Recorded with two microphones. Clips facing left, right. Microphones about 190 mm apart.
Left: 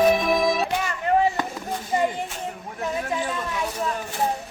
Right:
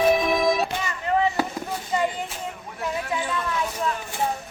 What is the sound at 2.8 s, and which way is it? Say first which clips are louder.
Chatter: left 1 dB; 40° left (ahead or behind).